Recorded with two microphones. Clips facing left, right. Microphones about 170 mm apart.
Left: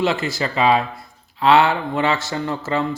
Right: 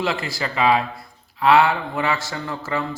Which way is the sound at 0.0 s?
25° left (ahead or behind).